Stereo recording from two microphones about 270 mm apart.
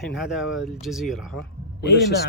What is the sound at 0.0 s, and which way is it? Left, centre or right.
Speech, centre.